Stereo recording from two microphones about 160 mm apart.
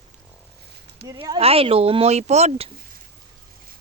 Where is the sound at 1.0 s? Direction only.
90° right.